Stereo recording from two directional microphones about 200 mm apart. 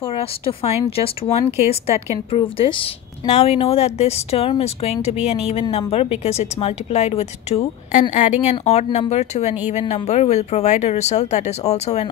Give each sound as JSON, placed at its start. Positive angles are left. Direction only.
{"t": 0.0, "sound": "a woman's voice", "side_deg": 30}